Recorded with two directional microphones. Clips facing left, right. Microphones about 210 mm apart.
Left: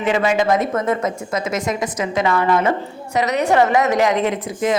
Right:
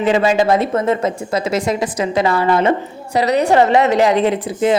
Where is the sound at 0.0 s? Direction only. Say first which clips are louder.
Right 3 dB; 30° right (ahead or behind).